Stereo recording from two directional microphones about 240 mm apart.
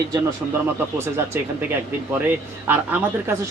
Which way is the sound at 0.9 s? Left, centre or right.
Centre.